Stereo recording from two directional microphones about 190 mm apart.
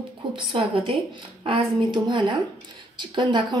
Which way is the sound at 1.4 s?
25° right (ahead or behind).